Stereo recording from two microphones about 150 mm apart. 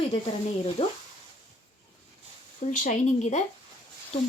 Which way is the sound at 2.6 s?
55° left (ahead or behind).